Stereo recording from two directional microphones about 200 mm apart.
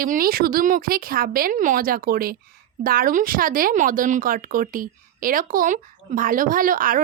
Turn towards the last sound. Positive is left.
turn(degrees=-45)  # may be behind; listen again after turning